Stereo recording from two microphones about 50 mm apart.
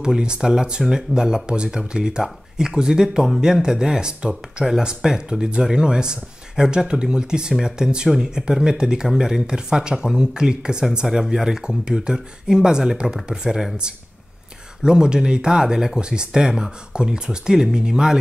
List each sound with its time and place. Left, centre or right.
0.0 s speech: centre
14.8 s speech: centre